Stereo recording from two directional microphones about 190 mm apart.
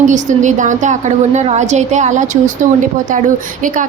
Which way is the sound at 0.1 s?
40° right (ahead or behind).